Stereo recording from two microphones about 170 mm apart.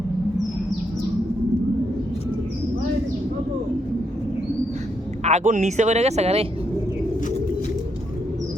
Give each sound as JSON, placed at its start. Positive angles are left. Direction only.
{"t": 5.2, "sound": "speech", "side_deg": -45}